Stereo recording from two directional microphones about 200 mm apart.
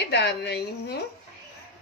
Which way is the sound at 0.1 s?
60° left (ahead or behind).